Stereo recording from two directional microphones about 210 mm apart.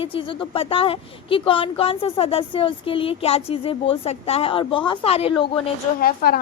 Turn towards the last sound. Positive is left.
turn(degrees=45)  # may be behind; listen again after turning